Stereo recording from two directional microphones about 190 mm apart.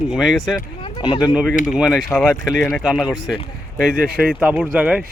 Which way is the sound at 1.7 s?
Centre (ahead or behind).